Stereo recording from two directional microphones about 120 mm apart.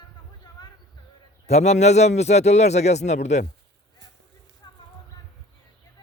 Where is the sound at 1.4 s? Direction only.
65° left (ahead or behind).